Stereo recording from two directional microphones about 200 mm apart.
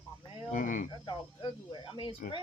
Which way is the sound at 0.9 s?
20° left (ahead or behind).